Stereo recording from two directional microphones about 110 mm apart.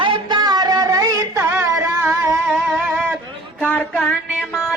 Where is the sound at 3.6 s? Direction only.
15° left (ahead or behind).